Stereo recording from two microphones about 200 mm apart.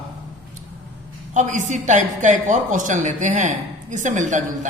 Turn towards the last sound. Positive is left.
turn(degrees=-40)  # may be behind; listen again after turning